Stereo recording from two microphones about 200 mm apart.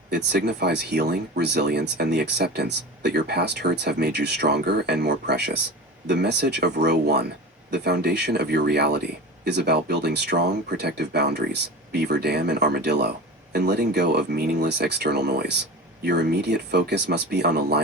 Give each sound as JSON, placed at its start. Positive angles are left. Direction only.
{"t": 0.1, "sound": "speech", "side_deg": -55}